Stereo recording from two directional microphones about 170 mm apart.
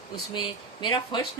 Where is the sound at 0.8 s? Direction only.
25° left (ahead or behind).